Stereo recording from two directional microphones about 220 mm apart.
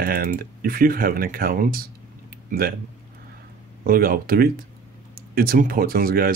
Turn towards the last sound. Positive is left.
turn(degrees=-40)  # may be behind; listen again after turning